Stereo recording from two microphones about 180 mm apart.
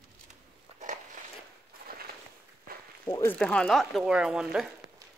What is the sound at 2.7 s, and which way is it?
Walk, 55° right (ahead or behind).